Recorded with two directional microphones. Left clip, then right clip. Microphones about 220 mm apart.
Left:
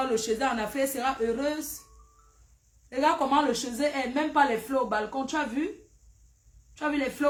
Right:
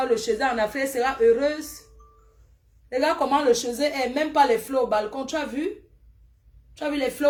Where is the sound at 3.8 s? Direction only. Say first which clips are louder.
Right 4 dB; 65° left (ahead or behind).